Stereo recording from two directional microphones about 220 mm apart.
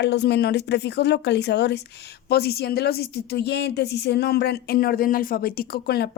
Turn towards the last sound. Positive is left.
turn(degrees=45)  # may be behind; listen again after turning